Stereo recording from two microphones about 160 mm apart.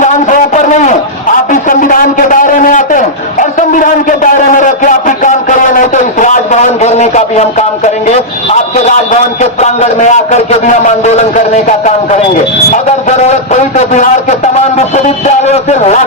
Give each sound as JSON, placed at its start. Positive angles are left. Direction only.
{"t": 0.0, "sound": "a sound", "side_deg": 50}
{"t": 9.4, "sound": "a man's voice", "side_deg": 45}
{"t": 12.7, "sound": "a man's voice", "side_deg": 45}